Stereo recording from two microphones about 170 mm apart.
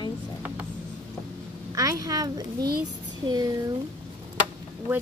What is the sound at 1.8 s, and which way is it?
Speech, 20° right (ahead or behind).